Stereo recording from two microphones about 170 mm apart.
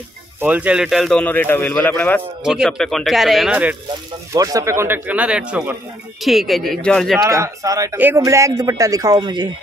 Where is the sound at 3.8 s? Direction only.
20° right (ahead or behind); by 7.2 s 5° left (ahead or behind).